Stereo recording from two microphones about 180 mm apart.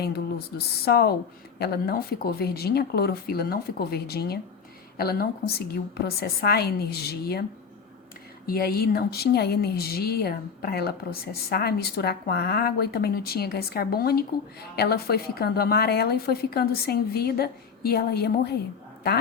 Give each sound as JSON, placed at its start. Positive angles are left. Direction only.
{"t": 0.0, "sound": "a woman's voice", "side_deg": 60}
{"t": 8.4, "sound": "a woman's voice", "side_deg": 60}